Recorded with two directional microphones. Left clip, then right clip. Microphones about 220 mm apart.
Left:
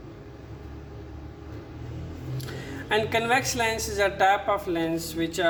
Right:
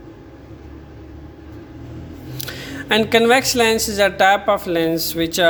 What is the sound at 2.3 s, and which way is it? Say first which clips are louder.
Speech: right 9 dB; 45° right (ahead or behind).